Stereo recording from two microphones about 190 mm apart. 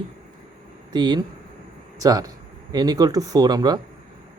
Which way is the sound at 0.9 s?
25° right (ahead or behind).